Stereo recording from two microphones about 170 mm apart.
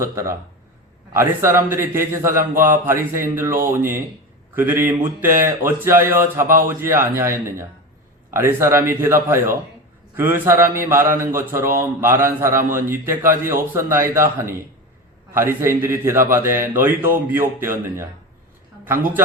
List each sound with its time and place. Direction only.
0.0 s a man's voice: 15° right (ahead or behind)